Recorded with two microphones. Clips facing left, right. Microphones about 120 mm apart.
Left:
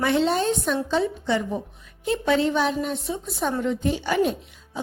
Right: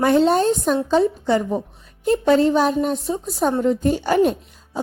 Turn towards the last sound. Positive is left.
turn(degrees=-45)  # may be behind; listen again after turning